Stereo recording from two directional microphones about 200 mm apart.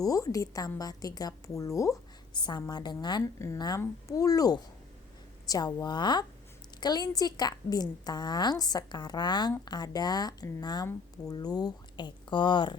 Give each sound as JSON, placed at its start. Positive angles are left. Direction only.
{"t": 0.0, "sound": "a woman's voice", "side_deg": 15}